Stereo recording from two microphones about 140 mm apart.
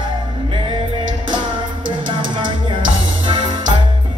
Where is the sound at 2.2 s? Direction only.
35° right (ahead or behind).